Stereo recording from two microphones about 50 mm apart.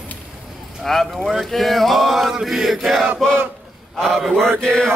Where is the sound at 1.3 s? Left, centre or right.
Centre.